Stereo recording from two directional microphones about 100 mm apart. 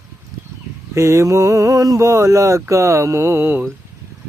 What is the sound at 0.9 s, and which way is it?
Speech, 30° right (ahead or behind).